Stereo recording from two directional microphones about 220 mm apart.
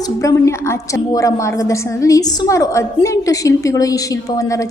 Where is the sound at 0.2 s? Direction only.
15° left (ahead or behind).